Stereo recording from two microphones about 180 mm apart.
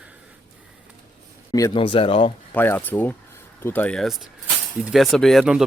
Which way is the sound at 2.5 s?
10° left (ahead or behind).